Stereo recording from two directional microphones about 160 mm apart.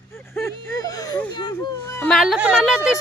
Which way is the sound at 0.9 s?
25° left (ahead or behind).